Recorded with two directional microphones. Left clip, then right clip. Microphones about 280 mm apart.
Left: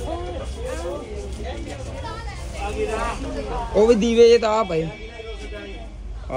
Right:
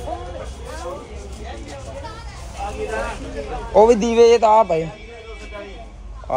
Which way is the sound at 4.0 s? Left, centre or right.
Centre.